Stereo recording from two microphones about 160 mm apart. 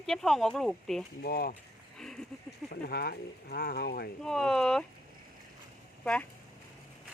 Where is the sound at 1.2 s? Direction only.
70° left (ahead or behind).